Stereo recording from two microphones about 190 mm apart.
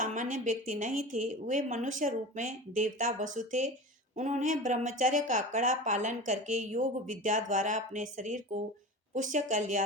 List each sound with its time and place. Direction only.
0.0 s a woman's voice: 40° right (ahead or behind)